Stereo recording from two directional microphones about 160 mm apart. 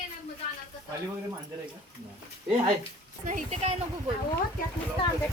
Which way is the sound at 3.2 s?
50° right (ahead or behind).